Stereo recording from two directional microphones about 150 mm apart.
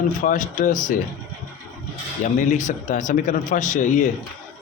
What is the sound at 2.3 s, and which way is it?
Speech, 55° left (ahead or behind).